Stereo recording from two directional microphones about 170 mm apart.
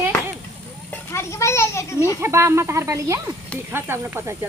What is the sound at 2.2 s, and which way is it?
Speech, 15° right (ahead or behind).